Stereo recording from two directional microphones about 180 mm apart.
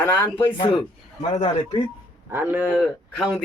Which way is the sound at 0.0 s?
15° left (ahead or behind).